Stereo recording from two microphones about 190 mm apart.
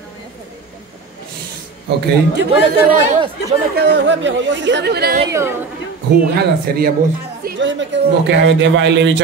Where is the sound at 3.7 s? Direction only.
60° right (ahead or behind).